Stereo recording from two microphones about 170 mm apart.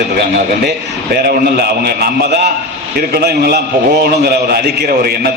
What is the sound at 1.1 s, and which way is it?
A man's voice, 65° right (ahead or behind).